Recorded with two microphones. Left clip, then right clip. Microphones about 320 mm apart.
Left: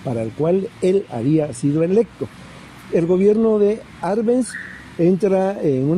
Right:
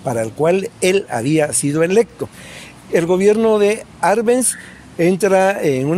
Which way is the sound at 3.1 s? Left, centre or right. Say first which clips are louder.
Right 2 dB; right.